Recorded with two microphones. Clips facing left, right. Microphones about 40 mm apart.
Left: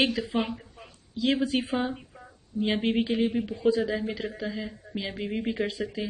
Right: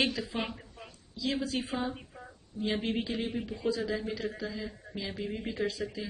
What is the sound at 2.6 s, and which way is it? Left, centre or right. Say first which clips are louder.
Speech: left 6 dB; left.